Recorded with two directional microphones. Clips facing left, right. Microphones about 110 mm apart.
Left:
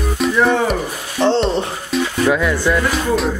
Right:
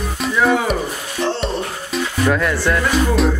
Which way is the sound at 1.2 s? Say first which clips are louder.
Left 5 dB; 30° left (ahead or behind).